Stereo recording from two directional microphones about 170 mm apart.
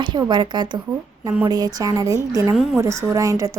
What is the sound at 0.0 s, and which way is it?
A woman's voice, 25° right (ahead or behind).